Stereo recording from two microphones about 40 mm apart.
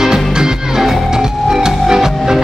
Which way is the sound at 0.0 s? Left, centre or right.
Centre.